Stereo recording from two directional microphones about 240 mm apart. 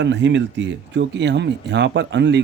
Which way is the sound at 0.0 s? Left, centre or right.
Right.